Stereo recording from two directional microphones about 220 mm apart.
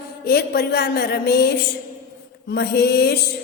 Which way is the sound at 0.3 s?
45° left (ahead or behind).